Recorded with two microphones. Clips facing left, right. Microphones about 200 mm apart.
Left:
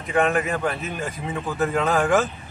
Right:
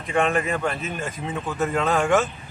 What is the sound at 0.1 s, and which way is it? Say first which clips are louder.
Speech: left 1 dB; centre (ahead or behind).